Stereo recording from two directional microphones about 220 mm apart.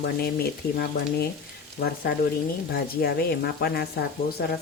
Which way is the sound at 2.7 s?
45° left (ahead or behind).